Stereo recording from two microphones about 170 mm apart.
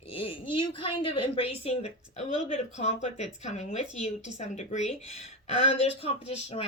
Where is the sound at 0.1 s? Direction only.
30° left (ahead or behind).